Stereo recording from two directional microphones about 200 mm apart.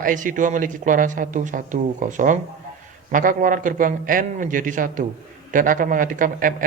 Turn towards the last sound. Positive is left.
turn(degrees=-45)  # may be behind; listen again after turning